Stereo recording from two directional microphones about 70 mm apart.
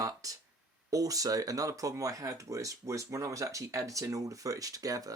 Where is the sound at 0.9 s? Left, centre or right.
Right.